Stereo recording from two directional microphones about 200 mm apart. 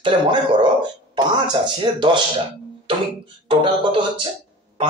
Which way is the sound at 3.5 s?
25° right (ahead or behind).